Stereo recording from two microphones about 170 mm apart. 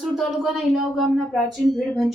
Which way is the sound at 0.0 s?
Centre (ahead or behind).